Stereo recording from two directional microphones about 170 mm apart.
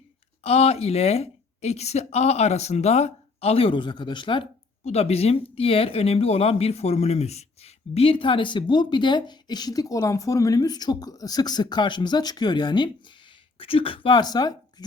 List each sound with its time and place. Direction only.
0.4 s a woman's voice: 35° left (ahead or behind)